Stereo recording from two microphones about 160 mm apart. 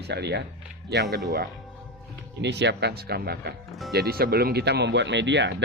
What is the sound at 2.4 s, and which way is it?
Speech, 90° right.